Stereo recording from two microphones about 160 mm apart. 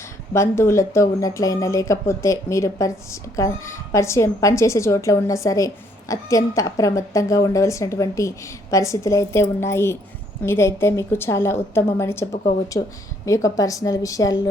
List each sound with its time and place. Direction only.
0.3 s a woman's voice: 15° left (ahead or behind)